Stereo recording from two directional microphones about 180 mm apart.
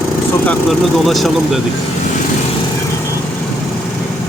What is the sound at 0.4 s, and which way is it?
Speech, centre (ahead or behind).